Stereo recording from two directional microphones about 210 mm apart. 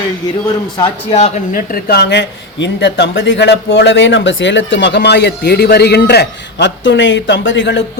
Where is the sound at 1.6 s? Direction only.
45° left (ahead or behind).